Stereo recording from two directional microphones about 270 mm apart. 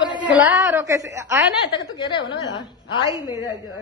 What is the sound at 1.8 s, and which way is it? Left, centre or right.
A woman's voice, centre.